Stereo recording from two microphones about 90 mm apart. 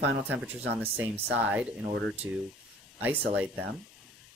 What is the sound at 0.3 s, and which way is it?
Speech, 20° right (ahead or behind).